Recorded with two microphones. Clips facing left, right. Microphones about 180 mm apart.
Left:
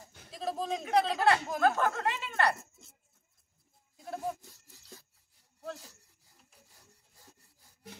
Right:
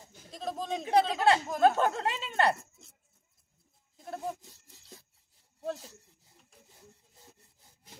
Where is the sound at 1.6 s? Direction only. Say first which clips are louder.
Right 3 dB; 25° right (ahead or behind).